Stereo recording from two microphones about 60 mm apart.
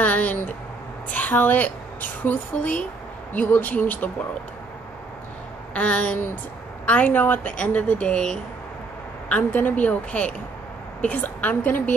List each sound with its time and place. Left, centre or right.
0.0 s a woman's voice: left
5.8 s a woman's voice: left